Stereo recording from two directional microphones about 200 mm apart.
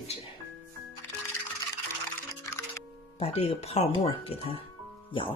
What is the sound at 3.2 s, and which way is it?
Speech, 30° left (ahead or behind).